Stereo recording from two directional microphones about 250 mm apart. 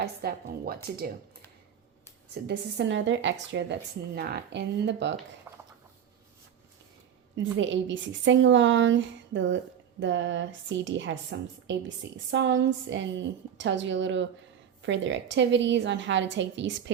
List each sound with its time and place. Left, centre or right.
0.0 s a woman's voice: right
2.3 s a woman's voice: right
5.5 s a sound: centre
7.6 s a woman's voice: right